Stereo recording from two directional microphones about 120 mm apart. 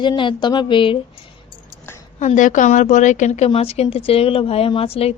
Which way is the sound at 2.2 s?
85° left.